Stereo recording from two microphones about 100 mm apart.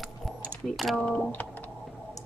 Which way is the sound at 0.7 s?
Centre (ahead or behind).